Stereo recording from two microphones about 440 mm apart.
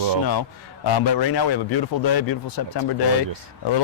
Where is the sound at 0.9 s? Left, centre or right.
Left.